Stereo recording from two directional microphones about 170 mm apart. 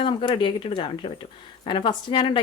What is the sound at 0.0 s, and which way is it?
Speech, 30° left (ahead or behind).